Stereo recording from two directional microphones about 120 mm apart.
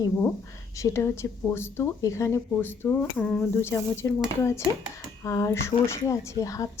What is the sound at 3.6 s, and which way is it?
Speech, 25° left (ahead or behind).